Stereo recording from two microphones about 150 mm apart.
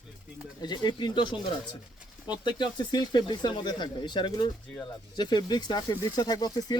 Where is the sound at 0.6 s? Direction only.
30° left (ahead or behind).